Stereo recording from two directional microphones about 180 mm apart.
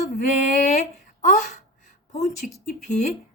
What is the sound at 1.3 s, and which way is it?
Speech, 45° left (ahead or behind).